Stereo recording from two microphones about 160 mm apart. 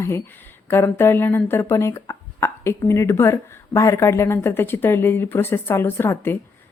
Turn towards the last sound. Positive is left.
turn(degrees=15)  # may be behind; listen again after turning